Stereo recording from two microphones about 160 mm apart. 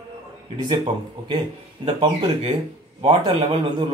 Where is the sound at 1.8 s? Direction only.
35° right (ahead or behind).